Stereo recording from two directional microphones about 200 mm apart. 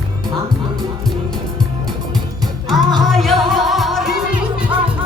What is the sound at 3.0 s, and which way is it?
Music, centre (ahead or behind).